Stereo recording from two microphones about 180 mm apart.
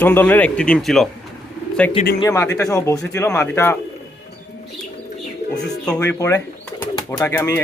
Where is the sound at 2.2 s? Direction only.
20° left (ahead or behind).